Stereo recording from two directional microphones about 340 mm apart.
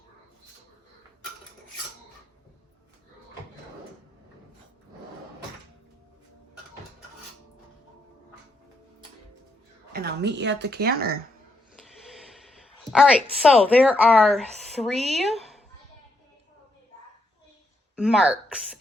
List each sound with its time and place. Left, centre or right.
9.9 s speech: right
11.8 s a sound: centre
13.4 s speech: centre
18.0 s a woman's voice: centre